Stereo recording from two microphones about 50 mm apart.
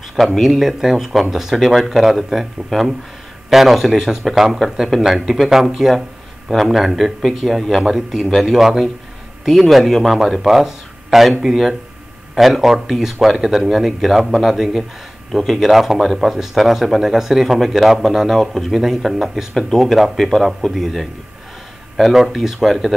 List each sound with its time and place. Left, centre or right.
0.1 s speech: centre